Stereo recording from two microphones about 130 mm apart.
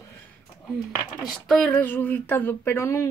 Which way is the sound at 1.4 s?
5° left (ahead or behind).